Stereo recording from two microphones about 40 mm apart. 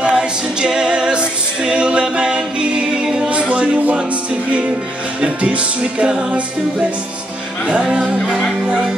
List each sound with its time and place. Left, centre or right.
0.1 s a capella: centre
3.3 s music: right
5.2 s music: right
7.6 s music: right